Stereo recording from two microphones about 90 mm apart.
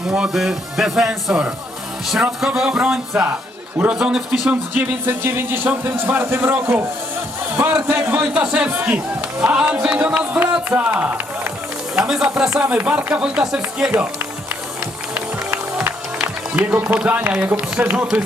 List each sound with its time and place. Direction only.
0.1 s speech: 5° right (ahead or behind)
2.6 s speech: 5° right (ahead or behind)
4.8 s speech: 25° right (ahead or behind)
8.0 s speech: 30° right (ahead or behind)
8.5 s speech: 15° right (ahead or behind)
11.9 s speech: 5° right (ahead or behind)
15.1 s music: 25° right (ahead or behind)
17.0 s speech: 15° right (ahead or behind)